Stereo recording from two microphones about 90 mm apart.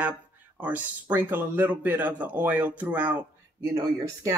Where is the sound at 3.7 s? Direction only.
35° right (ahead or behind).